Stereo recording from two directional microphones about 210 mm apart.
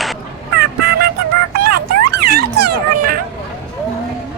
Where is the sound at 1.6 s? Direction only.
50° right (ahead or behind).